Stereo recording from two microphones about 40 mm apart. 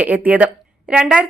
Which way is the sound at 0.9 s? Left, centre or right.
Right.